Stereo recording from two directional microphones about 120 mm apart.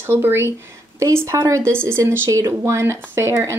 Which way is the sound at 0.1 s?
20° right (ahead or behind).